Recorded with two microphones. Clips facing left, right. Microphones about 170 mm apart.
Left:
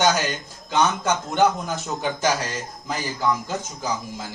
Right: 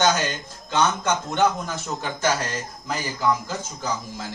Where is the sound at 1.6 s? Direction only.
20° left (ahead or behind).